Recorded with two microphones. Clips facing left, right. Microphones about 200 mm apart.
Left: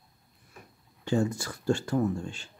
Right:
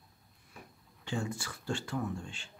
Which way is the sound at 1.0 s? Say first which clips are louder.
Left 9 dB; 40° left (ahead or behind).